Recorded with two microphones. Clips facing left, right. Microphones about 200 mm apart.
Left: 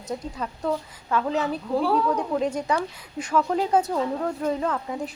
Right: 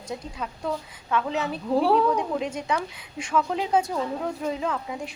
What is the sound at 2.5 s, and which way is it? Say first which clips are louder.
Speech: left 3 dB; 5° right (ahead or behind).